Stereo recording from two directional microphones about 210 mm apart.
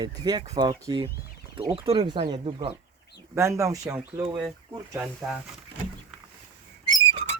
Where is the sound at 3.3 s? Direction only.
15° right (ahead or behind).